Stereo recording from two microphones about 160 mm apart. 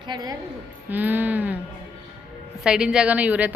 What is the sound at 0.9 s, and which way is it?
Speech, 10° right (ahead or behind).